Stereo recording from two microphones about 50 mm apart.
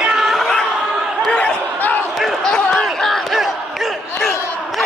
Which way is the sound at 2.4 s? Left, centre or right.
Centre.